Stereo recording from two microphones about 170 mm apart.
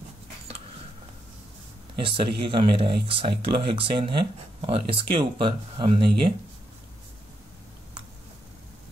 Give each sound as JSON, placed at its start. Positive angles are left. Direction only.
{"t": 2.0, "sound": "speech", "side_deg": -30}